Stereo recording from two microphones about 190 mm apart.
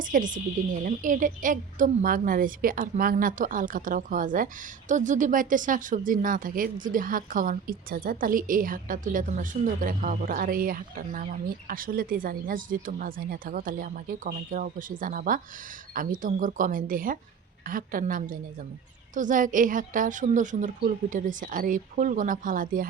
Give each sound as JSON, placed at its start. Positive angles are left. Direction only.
{"t": 0.0, "sound": "speech", "side_deg": -45}